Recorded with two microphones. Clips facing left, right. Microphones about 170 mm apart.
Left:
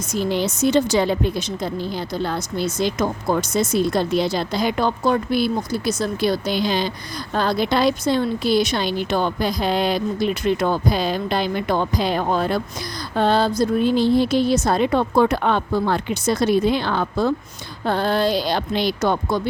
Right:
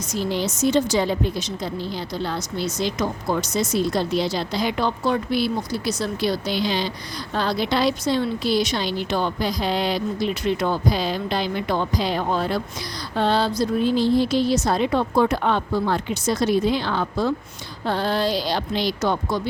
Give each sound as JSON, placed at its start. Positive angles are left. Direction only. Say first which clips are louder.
{"t": 0.1, "sound": "a woman's voice", "louder": "left 3 dB", "side_deg": 55}